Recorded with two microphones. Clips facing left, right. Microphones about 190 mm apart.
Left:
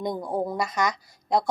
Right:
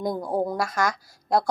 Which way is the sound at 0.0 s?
Centre (ahead or behind).